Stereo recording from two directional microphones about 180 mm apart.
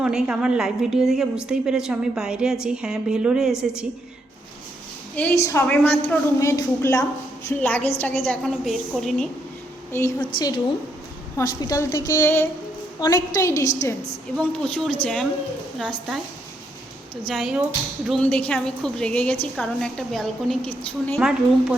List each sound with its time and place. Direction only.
0.0 s a woman's voice: 5° right (ahead or behind)
5.1 s a woman's voice: 10° left (ahead or behind)
9.9 s a woman's voice: 15° left (ahead or behind)
10.2 s a woman's voice: 25° left (ahead or behind)
14.3 s a woman's voice: 5° left (ahead or behind)
17.2 s a woman's voice: centre (ahead or behind)
21.2 s a woman's voice: 5° right (ahead or behind)